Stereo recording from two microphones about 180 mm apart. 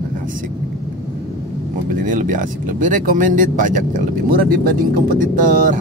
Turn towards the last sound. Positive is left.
turn(degrees=-50)  # may be behind; listen again after turning